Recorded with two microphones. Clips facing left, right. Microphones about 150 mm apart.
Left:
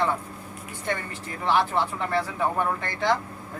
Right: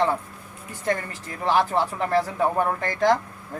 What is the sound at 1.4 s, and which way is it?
Speech, 40° right (ahead or behind).